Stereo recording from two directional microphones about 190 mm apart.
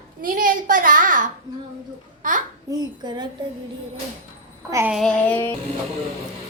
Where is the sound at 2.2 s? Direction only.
45° right (ahead or behind).